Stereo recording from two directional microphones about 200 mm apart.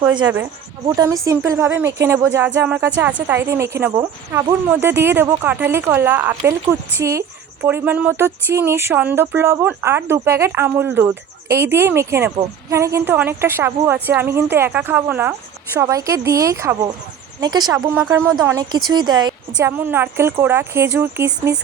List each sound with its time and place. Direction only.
0.9 s a woman's voice: 15° right (ahead or behind)
19.7 s a woman's voice: 10° right (ahead or behind)